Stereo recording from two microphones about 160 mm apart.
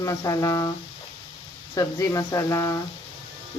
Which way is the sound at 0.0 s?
20° left (ahead or behind).